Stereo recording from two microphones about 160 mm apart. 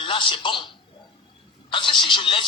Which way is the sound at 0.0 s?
30° left (ahead or behind).